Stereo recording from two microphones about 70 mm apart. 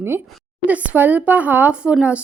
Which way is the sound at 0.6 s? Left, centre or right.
Centre.